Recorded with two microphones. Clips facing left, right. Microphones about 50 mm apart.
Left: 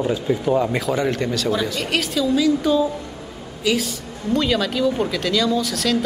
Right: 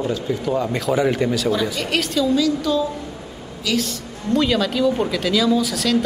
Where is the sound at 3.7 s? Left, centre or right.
Centre.